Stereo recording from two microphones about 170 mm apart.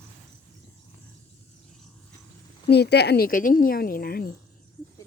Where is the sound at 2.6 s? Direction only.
75° left (ahead or behind).